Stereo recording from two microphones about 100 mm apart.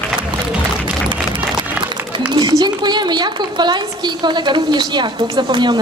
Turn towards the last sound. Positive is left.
turn(degrees=-45)  # may be behind; listen again after turning